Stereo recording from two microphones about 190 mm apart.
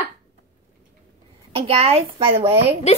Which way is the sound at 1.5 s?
30° right (ahead or behind).